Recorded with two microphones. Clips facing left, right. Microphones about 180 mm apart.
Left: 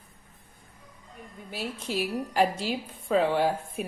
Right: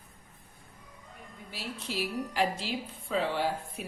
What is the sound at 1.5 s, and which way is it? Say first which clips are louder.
Speech: left 5 dB; 50° left (ahead or behind).